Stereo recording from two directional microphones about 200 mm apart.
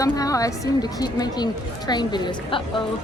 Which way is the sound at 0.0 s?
15° left (ahead or behind).